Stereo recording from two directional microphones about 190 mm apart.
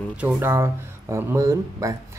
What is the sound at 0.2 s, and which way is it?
Speech, 10° right (ahead or behind).